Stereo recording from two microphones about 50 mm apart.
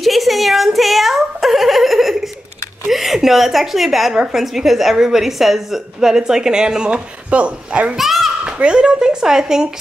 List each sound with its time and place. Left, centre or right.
0.0 s a sound: centre
2.9 s a woman's voice: centre; by 7.9 s right
7.9 s a child's voice: centre
8.5 s a woman's voice: centre